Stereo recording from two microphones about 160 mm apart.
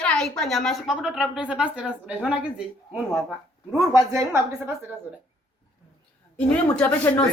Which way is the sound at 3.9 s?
20° right (ahead or behind).